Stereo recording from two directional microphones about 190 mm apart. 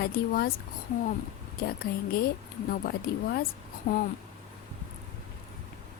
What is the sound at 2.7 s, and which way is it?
Speech, 55° left (ahead or behind).